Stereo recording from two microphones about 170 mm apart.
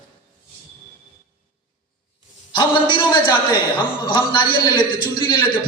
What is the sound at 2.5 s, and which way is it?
A man's voice, 25° left (ahead or behind).